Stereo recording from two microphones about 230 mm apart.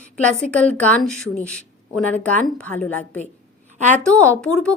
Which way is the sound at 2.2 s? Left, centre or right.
Centre.